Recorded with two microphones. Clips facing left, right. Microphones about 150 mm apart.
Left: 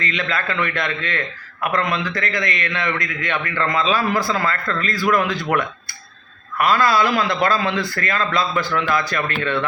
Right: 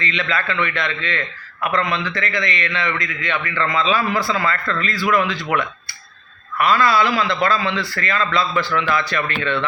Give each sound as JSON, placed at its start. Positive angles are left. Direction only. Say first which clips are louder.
{"t": 0.0, "sound": "a man's voice", "louder": "right 1 dB", "side_deg": 45}